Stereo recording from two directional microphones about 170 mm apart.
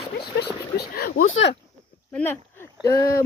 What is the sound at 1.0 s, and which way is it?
Speech, 60° left (ahead or behind).